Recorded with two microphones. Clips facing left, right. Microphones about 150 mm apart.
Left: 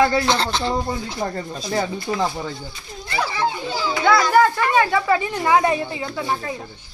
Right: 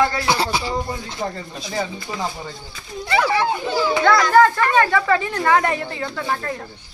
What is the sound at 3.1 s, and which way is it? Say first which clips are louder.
Speech: right 4 dB; 70° right (ahead or behind).